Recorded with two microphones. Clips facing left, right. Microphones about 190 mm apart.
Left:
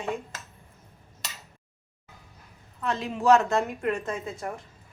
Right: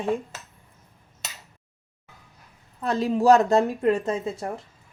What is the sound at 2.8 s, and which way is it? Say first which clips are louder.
A woman's voice: right 6 dB; 35° right (ahead or behind).